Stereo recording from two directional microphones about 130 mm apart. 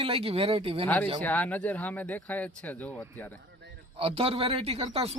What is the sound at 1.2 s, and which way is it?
Speech, 15° left (ahead or behind).